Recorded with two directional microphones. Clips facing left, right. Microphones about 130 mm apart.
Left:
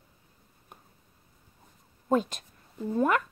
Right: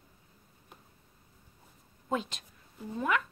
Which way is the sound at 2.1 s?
45° left (ahead or behind).